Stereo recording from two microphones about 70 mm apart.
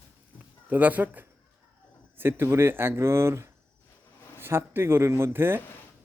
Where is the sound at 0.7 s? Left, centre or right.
Right.